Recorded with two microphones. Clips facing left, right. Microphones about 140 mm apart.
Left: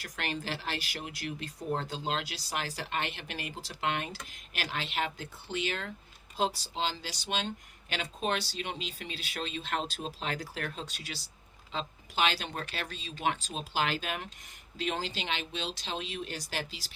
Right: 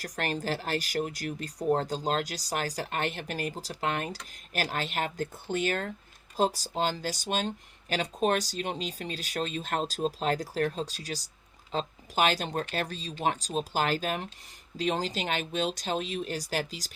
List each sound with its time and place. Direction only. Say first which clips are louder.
0.0 s speech: right 5 dB; 40° right (ahead or behind)